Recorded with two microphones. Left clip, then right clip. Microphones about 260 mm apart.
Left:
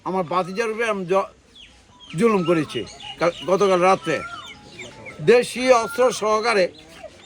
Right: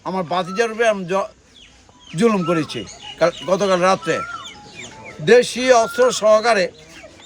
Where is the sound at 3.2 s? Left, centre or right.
Centre.